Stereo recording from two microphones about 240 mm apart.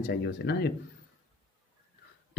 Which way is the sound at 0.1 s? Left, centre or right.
Left.